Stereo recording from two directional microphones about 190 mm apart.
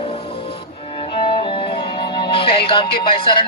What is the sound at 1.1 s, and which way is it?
Speech, 30° left (ahead or behind).